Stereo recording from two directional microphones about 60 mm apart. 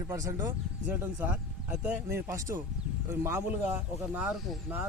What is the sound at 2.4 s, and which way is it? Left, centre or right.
Speech, right.